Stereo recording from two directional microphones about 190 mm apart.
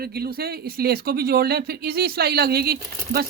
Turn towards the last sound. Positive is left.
turn(degrees=-55)  # may be behind; listen again after turning